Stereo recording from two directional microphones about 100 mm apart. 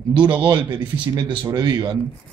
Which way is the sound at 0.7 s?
50° right (ahead or behind).